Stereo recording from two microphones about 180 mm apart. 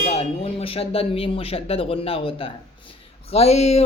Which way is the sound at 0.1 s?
35° left (ahead or behind).